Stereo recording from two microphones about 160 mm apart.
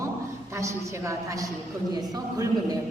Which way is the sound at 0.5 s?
15° right (ahead or behind).